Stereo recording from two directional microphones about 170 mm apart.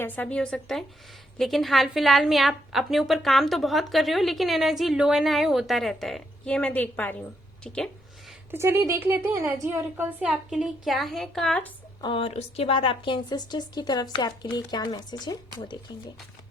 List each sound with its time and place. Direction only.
0.0 s a woman's voice: 10° left (ahead or behind)
8.4 s a woman's voice: 15° right (ahead or behind); by 11.7 s 5° left (ahead or behind)
12.0 s speech: 30° left (ahead or behind)